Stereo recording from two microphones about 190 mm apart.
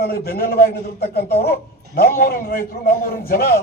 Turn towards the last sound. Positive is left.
turn(degrees=50)  # may be behind; listen again after turning